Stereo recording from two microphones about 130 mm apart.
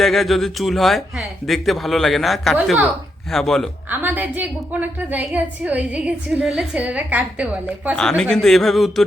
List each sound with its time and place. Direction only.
0.0 s speech: centre (ahead or behind)
3.8 s a woman's voice: 15° right (ahead or behind)
7.9 s speech: 5° left (ahead or behind)